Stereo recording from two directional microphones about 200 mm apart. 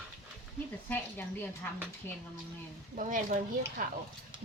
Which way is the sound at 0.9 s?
10° left (ahead or behind).